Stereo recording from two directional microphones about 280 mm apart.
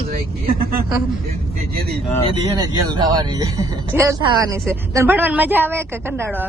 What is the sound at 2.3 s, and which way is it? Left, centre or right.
A woman's voice, centre.